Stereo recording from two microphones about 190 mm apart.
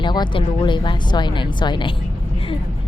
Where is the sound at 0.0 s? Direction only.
25° left (ahead or behind).